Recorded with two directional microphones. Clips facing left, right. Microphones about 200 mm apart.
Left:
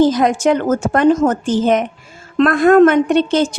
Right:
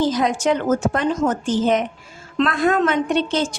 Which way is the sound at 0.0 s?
50° left (ahead or behind).